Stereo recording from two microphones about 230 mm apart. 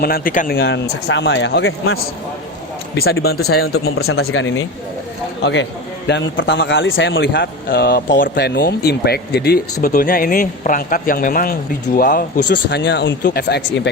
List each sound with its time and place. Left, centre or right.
0.0 s a man's voice: left
3.2 s a man's voice: left
3.8 s a man's voice: left
7.7 s a man's voice: left